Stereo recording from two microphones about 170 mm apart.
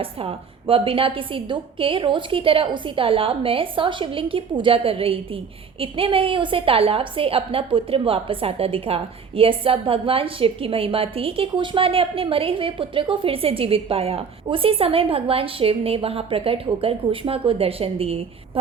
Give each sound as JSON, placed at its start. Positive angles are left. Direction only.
{"t": 0.0, "sound": "a woman's voice", "side_deg": -35}